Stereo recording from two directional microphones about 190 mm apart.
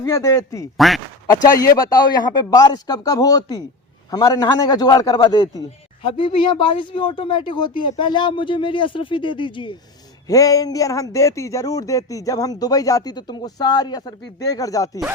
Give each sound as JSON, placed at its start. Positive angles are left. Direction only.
{"t": 0.0, "sound": "a man's voice", "side_deg": 15}
{"t": 0.8, "sound": "speech", "side_deg": 0}
{"t": 1.5, "sound": "speech", "side_deg": 20}